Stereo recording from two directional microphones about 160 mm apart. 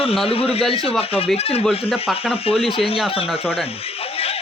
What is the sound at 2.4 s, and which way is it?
Speech, 35° left (ahead or behind).